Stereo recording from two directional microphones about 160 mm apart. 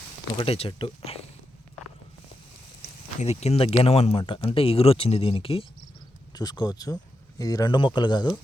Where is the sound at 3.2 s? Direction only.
40° left (ahead or behind).